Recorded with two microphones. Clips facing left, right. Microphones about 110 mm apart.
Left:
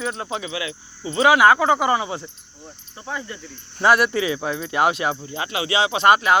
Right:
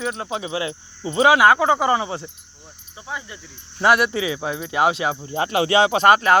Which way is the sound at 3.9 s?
20° right (ahead or behind).